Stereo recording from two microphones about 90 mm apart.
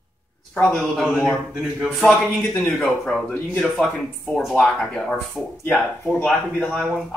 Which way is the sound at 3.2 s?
15° left (ahead or behind).